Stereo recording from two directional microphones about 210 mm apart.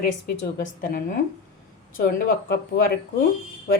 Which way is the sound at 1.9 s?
45° left (ahead or behind).